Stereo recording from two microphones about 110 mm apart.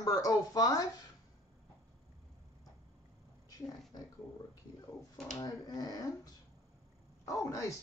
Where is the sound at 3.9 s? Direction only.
35° left (ahead or behind).